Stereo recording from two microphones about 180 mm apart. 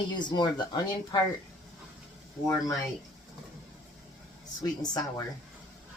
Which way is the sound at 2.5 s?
20° left (ahead or behind).